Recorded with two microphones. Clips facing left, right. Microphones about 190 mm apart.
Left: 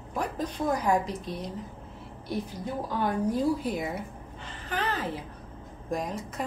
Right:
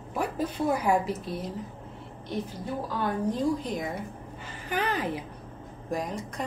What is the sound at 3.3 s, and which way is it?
Speech, 5° left (ahead or behind).